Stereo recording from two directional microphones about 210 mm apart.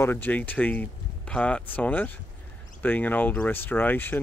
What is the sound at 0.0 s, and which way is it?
Speech, 10° left (ahead or behind).